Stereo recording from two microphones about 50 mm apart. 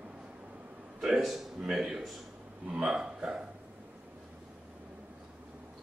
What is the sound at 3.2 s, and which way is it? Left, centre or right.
Burping, centre.